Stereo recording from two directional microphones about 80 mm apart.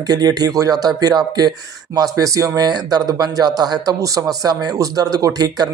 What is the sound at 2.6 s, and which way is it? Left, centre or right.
Speech, right.